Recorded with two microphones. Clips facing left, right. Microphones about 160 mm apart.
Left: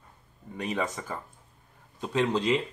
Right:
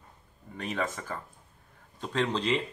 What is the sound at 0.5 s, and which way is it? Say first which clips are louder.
Speech: left 2 dB; 15° left (ahead or behind).